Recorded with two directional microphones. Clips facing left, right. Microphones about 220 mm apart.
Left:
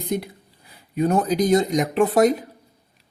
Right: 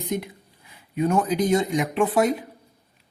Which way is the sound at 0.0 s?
35° left (ahead or behind).